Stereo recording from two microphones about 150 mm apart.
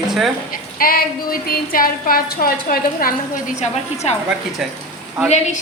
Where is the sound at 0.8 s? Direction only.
75° left (ahead or behind); by 4.1 s 50° left (ahead or behind).